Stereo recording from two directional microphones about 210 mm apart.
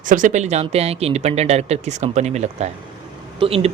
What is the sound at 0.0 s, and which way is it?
Speech, 40° right (ahead or behind).